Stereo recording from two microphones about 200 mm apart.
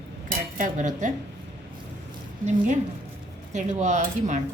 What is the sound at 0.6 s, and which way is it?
Speech, 40° right (ahead or behind).